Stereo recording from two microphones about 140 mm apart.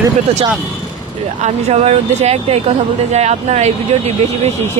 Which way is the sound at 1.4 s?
50° right (ahead or behind).